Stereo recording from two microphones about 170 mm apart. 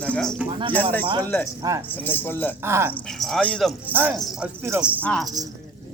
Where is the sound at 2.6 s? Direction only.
15° right (ahead or behind).